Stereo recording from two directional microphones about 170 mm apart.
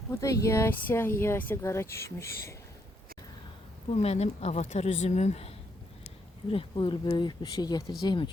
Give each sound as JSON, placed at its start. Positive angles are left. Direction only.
{"t": 0.1, "sound": "speech", "side_deg": 20}
{"t": 3.8, "sound": "speech", "side_deg": 40}